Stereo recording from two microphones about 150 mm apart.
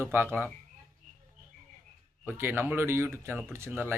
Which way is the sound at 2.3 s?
15° right (ahead or behind).